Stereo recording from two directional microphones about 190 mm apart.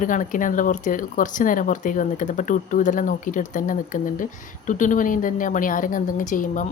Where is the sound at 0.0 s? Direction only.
45° left (ahead or behind).